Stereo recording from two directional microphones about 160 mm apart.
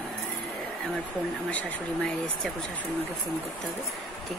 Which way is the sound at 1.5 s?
10° left (ahead or behind).